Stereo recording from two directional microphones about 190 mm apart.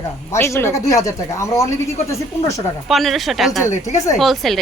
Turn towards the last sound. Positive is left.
turn(degrees=0)  # may be behind; listen again after turning